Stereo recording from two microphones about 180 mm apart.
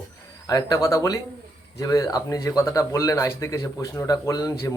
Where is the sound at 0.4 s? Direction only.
20° left (ahead or behind).